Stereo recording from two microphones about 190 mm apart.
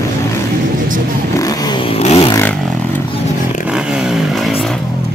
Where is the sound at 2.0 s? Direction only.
35° left (ahead or behind).